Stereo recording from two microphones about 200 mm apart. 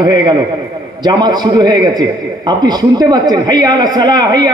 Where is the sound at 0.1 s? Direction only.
20° right (ahead or behind).